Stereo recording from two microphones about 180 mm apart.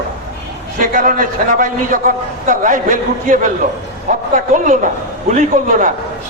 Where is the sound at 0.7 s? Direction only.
45° right (ahead or behind).